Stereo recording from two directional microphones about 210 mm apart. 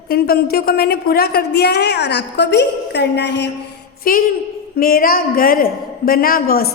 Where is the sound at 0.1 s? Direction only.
50° left (ahead or behind).